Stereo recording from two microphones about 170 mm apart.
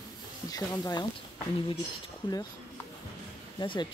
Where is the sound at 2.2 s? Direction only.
25° left (ahead or behind).